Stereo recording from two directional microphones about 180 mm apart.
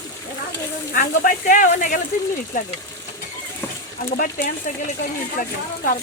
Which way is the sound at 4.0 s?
55° left (ahead or behind).